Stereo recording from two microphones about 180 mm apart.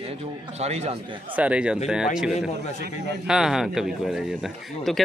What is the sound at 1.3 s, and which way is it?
Speech, 5° right (ahead or behind).